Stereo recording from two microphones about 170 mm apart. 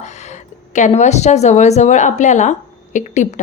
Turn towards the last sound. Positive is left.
turn(degrees=45)  # may be behind; listen again after turning